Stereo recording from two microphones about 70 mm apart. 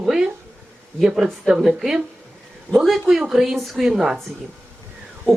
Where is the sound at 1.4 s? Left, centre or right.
Centre.